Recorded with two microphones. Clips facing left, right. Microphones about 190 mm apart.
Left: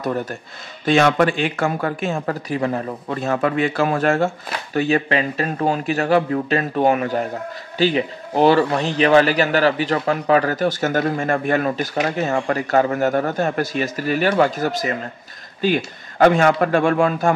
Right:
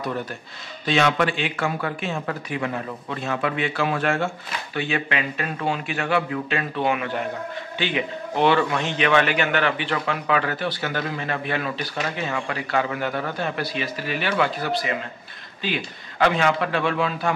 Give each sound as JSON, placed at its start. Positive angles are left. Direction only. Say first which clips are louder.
{"t": 0.0, "sound": "a man's voice", "louder": "left 5 dB", "side_deg": 45}